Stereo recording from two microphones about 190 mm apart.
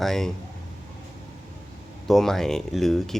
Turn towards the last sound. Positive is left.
turn(degrees=0)  # may be behind; listen again after turning